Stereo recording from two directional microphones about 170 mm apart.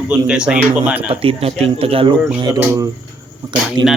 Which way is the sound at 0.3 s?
5° right (ahead or behind).